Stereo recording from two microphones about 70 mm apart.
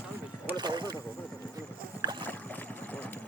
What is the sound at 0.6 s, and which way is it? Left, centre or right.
Boat, right.